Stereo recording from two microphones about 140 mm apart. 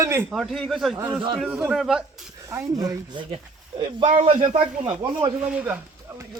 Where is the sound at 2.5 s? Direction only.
25° right (ahead or behind); by 4.3 s 40° right (ahead or behind).